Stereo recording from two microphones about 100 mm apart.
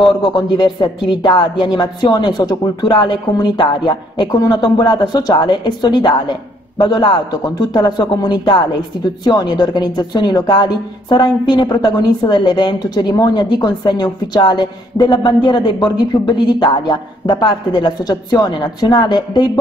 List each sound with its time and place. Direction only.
0.0 s a woman's voice: 50° left (ahead or behind)